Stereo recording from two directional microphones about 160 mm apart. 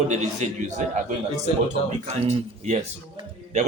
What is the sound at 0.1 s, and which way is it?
Speech, 45° right (ahead or behind).